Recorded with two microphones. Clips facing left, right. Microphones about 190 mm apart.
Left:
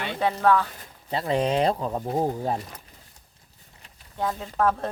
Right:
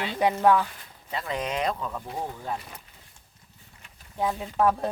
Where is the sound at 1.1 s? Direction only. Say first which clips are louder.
Left 7 dB; 30° left (ahead or behind).